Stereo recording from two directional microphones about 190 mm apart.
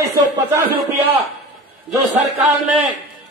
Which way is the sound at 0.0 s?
20° right (ahead or behind).